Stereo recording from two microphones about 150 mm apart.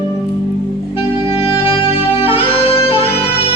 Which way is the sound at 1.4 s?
40° left (ahead or behind).